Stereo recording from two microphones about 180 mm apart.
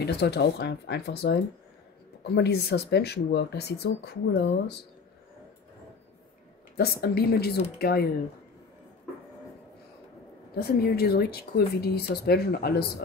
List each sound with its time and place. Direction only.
0.0 s speech: 65° left (ahead or behind)
6.8 s speech: 60° left (ahead or behind)
10.5 s speech: 60° left (ahead or behind)